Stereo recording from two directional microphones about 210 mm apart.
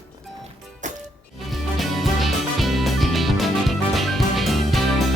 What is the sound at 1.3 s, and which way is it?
Music, centre (ahead or behind).